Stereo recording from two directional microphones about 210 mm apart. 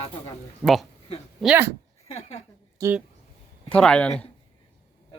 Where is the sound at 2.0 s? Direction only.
30° left (ahead or behind).